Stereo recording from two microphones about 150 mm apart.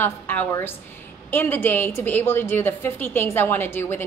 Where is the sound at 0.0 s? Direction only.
10° left (ahead or behind).